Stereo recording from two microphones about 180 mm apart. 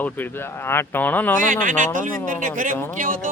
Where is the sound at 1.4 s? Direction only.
50° right (ahead or behind).